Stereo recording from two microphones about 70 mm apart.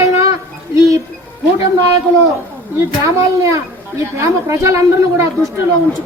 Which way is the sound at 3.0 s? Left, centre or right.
Right.